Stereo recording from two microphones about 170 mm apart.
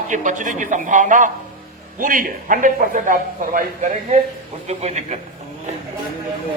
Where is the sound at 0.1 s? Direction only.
50° right (ahead or behind).